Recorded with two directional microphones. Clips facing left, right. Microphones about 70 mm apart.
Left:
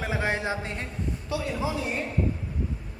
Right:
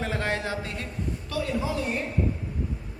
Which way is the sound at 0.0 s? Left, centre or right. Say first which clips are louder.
Left 1 dB; centre.